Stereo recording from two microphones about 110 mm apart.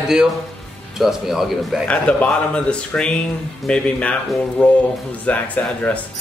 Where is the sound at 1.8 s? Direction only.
10° left (ahead or behind).